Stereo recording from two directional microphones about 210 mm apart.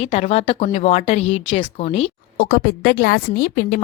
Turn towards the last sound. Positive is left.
turn(degrees=50)  # may be behind; listen again after turning